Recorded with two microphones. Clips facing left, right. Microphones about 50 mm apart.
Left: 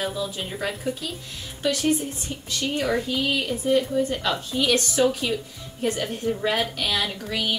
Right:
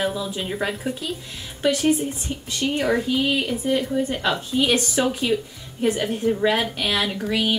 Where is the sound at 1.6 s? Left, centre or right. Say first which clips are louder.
Right 3 dB; right.